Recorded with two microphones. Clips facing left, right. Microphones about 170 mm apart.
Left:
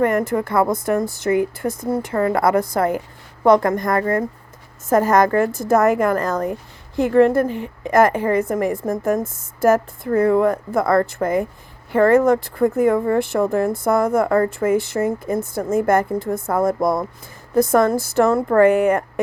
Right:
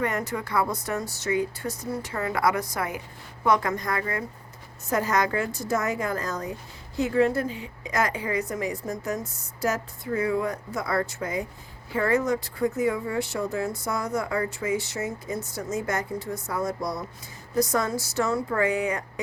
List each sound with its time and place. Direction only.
0.0 s a woman's voice: 50° left (ahead or behind)